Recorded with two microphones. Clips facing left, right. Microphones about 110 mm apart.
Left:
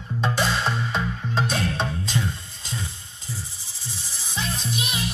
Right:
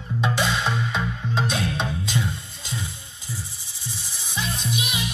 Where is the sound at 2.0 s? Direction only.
30° left (ahead or behind).